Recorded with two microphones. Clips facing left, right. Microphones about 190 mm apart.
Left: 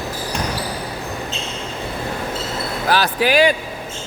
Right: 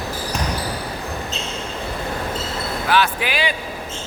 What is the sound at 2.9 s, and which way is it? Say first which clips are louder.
Music: left 3 dB; 40° left (ahead or behind).